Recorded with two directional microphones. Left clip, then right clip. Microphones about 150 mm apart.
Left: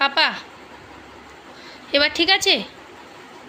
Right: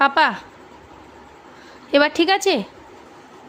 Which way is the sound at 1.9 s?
65° right (ahead or behind).